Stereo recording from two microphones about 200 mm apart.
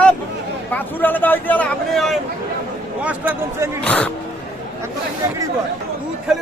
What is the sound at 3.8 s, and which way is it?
Speech, 5° left (ahead or behind).